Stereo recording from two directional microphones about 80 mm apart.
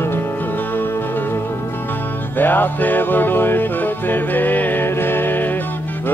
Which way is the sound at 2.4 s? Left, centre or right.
Left.